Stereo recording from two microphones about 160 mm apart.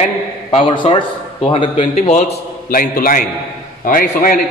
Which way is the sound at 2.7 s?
60° left (ahead or behind).